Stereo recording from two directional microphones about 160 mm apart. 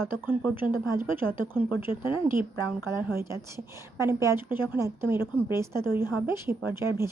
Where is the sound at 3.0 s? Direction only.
15° right (ahead or behind).